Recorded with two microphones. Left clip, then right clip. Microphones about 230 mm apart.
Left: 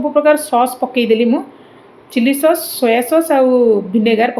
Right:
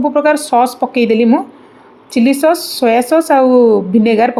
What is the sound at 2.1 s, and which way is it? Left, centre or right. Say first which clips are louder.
Speech: right 2 dB; right.